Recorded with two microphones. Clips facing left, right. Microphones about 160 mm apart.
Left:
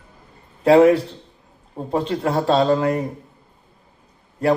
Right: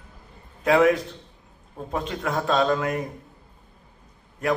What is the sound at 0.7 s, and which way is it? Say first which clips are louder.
A man's voice: left 6 dB; 30° left (ahead or behind).